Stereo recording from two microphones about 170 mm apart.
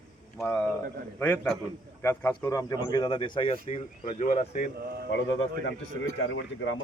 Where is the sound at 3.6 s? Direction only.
40° left (ahead or behind).